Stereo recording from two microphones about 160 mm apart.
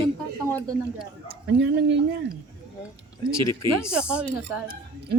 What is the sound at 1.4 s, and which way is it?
Speech, 90° right.